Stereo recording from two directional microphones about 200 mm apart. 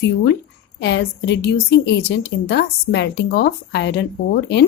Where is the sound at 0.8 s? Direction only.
55° left (ahead or behind).